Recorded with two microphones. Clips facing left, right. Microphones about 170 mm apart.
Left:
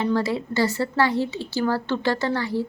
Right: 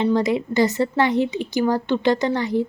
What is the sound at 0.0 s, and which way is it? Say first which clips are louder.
A woman's voice: right 4 dB; 20° right (ahead or behind).